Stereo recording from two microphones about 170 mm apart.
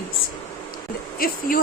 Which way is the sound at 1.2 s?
60° left (ahead or behind).